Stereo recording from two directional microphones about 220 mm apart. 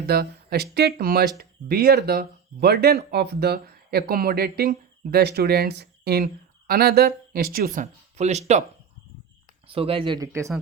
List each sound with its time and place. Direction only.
0.1 s speech: 45° right (ahead or behind); by 8.6 s 30° right (ahead or behind)
9.6 s speech: 25° right (ahead or behind)